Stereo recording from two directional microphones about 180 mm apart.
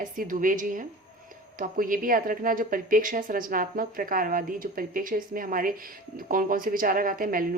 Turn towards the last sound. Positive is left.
turn(degrees=-50)  # may be behind; listen again after turning